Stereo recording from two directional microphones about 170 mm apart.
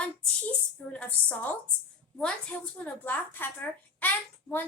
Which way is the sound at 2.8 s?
10° left (ahead or behind).